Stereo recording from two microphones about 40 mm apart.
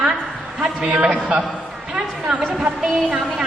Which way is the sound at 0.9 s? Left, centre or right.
Right.